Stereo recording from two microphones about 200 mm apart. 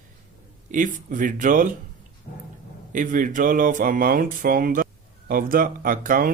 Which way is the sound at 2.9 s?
40° right (ahead or behind).